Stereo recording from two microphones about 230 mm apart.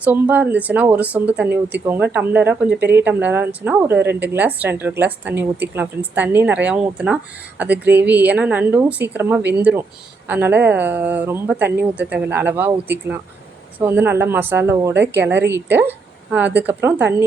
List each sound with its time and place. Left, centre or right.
0.0 s a woman's voice: centre
13.7 s a woman's voice: centre